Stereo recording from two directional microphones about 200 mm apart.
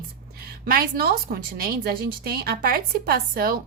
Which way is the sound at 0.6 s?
50° right (ahead or behind).